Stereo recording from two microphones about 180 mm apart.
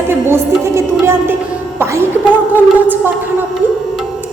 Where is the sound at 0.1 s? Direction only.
15° right (ahead or behind).